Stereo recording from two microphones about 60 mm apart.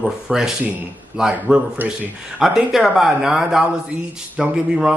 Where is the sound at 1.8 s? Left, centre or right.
Right.